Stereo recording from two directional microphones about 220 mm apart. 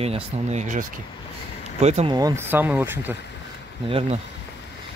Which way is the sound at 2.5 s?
10° right (ahead or behind).